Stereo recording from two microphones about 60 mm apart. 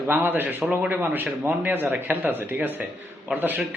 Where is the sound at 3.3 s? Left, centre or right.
Right.